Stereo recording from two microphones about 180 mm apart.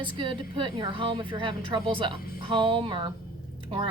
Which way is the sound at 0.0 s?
25° right (ahead or behind).